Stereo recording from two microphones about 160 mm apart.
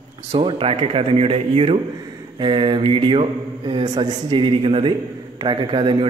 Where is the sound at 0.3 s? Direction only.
35° right (ahead or behind).